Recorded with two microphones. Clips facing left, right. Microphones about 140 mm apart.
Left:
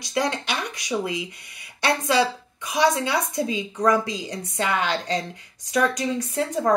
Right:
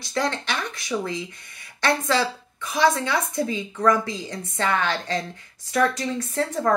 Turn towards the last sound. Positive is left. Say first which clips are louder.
# even
turn(degrees=15)  # may be behind; listen again after turning